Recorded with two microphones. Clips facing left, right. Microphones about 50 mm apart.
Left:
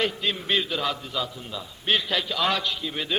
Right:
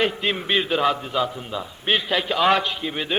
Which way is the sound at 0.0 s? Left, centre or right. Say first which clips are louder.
Right 4 dB; right.